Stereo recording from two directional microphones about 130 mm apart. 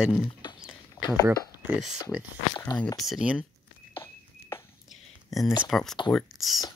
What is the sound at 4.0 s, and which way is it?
Walk, 20° left (ahead or behind).